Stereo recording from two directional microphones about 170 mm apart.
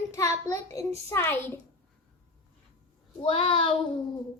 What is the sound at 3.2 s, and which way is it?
Speech, 35° left (ahead or behind).